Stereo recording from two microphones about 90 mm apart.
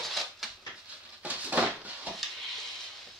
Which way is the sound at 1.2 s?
15° right (ahead or behind).